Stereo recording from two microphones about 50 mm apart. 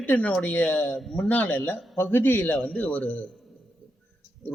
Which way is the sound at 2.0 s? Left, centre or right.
Left.